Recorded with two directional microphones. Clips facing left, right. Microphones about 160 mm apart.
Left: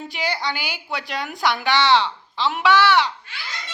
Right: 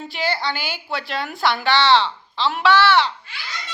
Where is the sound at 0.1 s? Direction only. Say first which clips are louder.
Right 3 dB; 15° left (ahead or behind).